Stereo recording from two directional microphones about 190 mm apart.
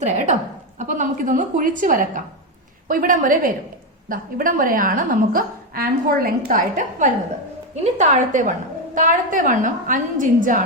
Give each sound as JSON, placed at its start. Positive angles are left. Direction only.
{"t": 0.0, "sound": "a woman's voice", "side_deg": -40}